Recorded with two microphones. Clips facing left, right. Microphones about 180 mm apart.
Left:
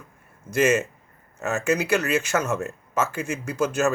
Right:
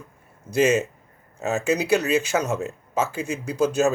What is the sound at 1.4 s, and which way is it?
Speech, 15° right (ahead or behind).